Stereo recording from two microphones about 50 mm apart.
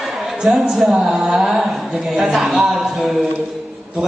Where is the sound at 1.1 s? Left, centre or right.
Centre.